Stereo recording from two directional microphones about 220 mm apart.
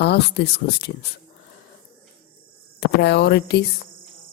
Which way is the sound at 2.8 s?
50° left (ahead or behind).